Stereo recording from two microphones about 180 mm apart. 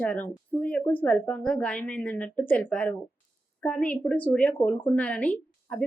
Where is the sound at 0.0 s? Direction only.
10° left (ahead or behind).